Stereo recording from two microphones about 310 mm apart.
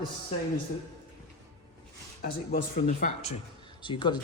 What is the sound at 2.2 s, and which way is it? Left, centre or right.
A man's voice, left.